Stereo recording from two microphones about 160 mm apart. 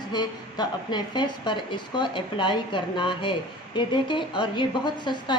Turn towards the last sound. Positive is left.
turn(degrees=30)  # may be behind; listen again after turning